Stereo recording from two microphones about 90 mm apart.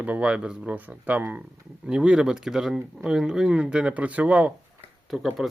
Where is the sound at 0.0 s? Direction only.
15° right (ahead or behind).